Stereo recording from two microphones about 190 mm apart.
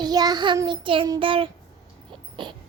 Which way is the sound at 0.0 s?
20° right (ahead or behind).